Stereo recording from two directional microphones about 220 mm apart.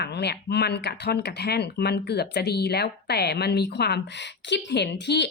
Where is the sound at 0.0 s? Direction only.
50° left (ahead or behind).